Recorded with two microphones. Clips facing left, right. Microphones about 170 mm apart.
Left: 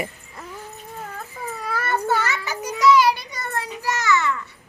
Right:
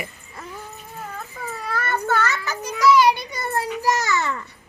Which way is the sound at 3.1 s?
25° right (ahead or behind).